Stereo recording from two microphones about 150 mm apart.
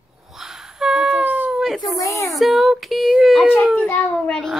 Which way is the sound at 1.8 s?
20° left (ahead or behind).